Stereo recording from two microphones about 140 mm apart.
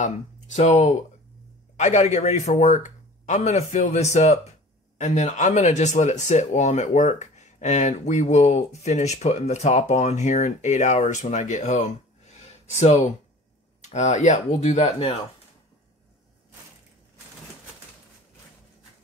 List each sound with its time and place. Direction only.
0.0 s speech: 55° left (ahead or behind)